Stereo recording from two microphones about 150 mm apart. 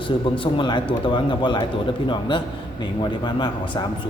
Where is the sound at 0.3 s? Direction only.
35° left (ahead or behind).